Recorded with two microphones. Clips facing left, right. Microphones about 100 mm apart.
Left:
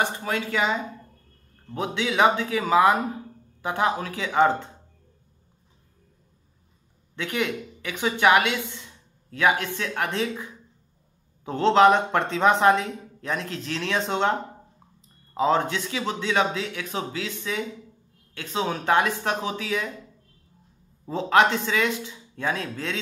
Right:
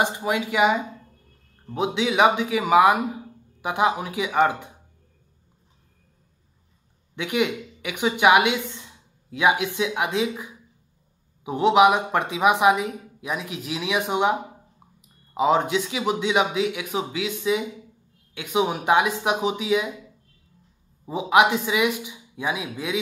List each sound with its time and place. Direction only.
0.0 s speech: 15° right (ahead or behind)
7.2 s a woman's voice: 15° right (ahead or behind)